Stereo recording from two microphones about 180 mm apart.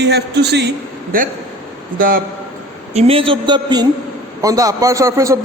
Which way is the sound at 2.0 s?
50° right (ahead or behind).